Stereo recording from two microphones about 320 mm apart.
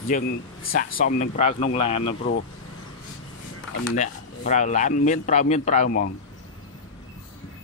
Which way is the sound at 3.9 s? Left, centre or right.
Left.